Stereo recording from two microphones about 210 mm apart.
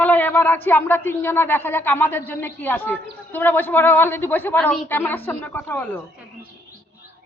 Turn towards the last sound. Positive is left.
turn(degrees=10)  # may be behind; listen again after turning